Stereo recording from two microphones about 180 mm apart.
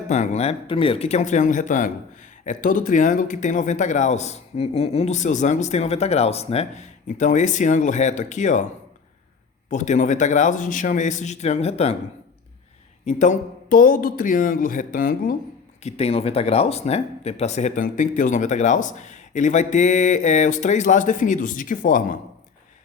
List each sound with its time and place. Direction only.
0.1 s speech: 40° left (ahead or behind)
9.6 s speech: 45° left (ahead or behind)
13.1 s speech: 40° left (ahead or behind)
15.8 s speech: 35° left (ahead or behind)